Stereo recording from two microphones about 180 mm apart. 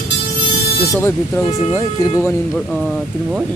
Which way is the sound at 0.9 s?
15° left (ahead or behind).